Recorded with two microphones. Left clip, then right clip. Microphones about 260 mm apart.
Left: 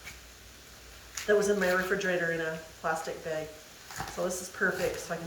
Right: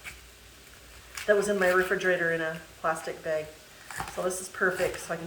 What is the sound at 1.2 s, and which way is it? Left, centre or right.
Speech, centre.